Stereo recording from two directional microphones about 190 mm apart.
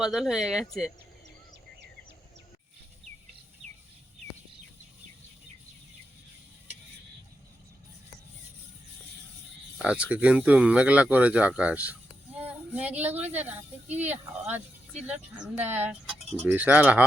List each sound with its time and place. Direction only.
0.0 s speech: centre (ahead or behind)
9.7 s speech: 5° right (ahead or behind)